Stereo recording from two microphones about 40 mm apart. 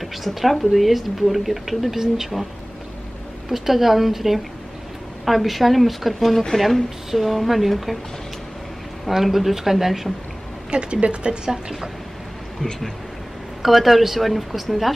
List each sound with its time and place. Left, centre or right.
0.0 s speech: centre
3.4 s a woman's voice: centre
9.1 s speech: centre
10.7 s speech: right
13.6 s speech: centre